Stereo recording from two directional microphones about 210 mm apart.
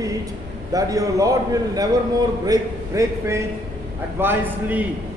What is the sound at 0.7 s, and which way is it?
A man's voice, 15° right (ahead or behind).